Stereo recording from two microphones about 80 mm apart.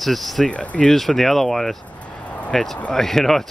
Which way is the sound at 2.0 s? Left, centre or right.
Centre.